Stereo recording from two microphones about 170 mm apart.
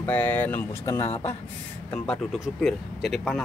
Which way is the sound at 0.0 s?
10° left (ahead or behind).